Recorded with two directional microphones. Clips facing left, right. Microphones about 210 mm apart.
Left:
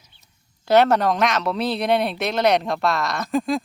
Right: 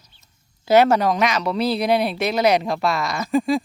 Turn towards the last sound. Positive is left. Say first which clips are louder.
# right 3 dB
turn(degrees=0)  # may be behind; listen again after turning